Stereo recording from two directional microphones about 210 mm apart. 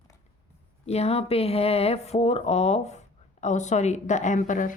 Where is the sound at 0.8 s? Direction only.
30° left (ahead or behind).